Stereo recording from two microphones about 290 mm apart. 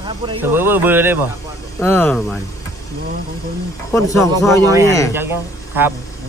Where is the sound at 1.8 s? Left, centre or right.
Centre.